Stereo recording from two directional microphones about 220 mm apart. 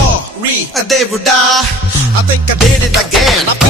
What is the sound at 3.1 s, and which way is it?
Speech, centre (ahead or behind).